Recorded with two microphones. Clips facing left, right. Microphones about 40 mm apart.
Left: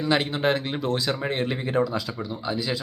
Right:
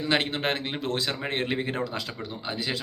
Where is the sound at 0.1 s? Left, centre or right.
Right.